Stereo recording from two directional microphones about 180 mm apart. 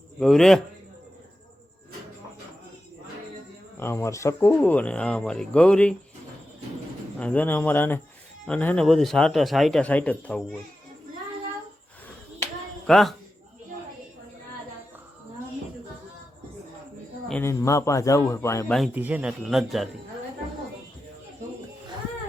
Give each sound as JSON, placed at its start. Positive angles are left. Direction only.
{"t": 0.2, "sound": "a man's voice", "side_deg": 0}
{"t": 3.8, "sound": "speech", "side_deg": 15}
{"t": 7.2, "sound": "a man's voice", "side_deg": 10}
{"t": 12.9, "sound": "a man's voice", "side_deg": 0}
{"t": 17.2, "sound": "speech", "side_deg": 10}
{"t": 18.9, "sound": "a man's voice", "side_deg": -10}